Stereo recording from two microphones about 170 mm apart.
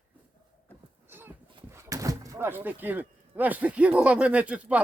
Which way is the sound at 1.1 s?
10° right (ahead or behind).